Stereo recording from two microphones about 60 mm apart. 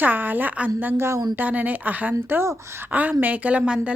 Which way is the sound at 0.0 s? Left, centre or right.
Right.